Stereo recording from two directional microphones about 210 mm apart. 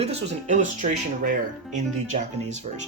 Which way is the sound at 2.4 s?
35° right (ahead or behind).